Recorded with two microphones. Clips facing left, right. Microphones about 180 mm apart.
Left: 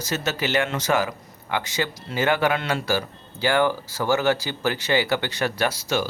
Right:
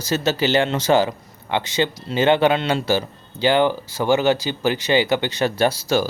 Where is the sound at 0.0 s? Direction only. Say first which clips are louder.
Right 6 dB; 30° right (ahead or behind).